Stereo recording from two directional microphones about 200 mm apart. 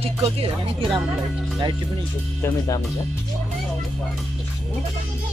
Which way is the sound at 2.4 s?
15° left (ahead or behind).